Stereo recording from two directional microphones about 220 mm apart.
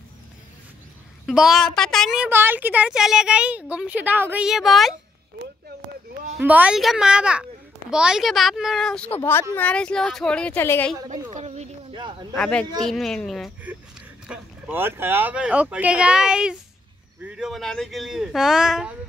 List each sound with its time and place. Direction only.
1.2 s a woman's voice: centre (ahead or behind)
6.3 s a woman's voice: 5° right (ahead or behind); by 11.0 s 10° left (ahead or behind)
11.3 s a sound: 30° right (ahead or behind)
12.4 s a woman's voice: 5° left (ahead or behind)